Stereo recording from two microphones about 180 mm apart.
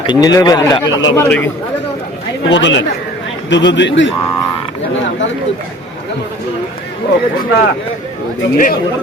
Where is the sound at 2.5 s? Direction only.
90° left.